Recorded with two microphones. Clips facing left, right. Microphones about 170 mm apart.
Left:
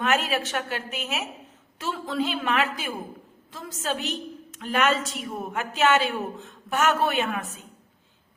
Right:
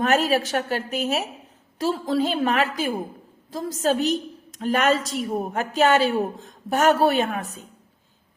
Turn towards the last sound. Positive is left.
turn(degrees=-40)  # may be behind; listen again after turning